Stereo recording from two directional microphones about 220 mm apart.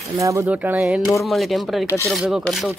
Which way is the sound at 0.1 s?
15° right (ahead or behind).